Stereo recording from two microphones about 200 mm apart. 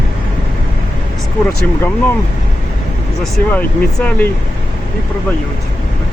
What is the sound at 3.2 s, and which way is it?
Speech, 5° left (ahead or behind).